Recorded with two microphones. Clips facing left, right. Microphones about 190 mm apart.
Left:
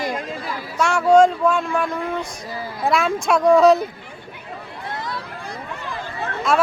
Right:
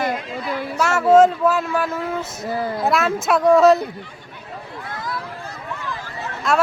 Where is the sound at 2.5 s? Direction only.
55° right (ahead or behind).